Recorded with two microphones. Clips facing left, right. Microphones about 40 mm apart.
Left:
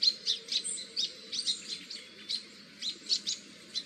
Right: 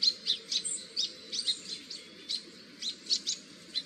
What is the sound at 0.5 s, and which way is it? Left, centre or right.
Bird, centre.